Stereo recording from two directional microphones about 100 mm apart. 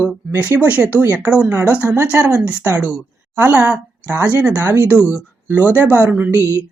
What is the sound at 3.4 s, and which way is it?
Speech, 20° right (ahead or behind).